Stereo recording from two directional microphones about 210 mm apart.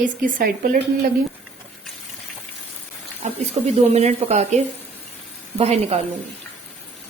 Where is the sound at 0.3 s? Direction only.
40° right (ahead or behind).